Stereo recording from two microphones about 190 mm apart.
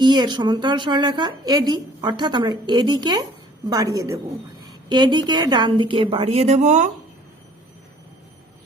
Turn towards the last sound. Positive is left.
turn(degrees=-35)  # may be behind; listen again after turning